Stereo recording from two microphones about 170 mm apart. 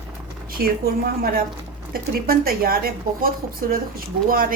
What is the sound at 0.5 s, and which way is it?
Speech, 60° right (ahead or behind).